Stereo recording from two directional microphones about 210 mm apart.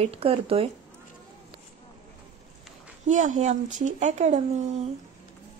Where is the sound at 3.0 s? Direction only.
35° right (ahead or behind).